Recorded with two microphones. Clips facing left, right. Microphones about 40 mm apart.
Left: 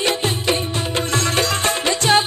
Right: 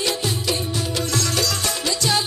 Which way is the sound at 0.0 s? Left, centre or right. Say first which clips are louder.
Left 4 dB; left.